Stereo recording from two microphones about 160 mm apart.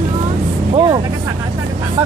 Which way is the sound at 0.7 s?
25° right (ahead or behind).